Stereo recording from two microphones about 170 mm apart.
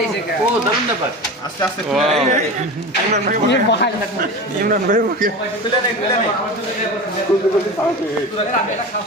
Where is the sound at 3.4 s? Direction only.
90° left.